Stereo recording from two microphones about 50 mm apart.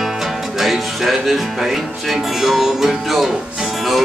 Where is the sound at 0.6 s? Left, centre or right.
Centre.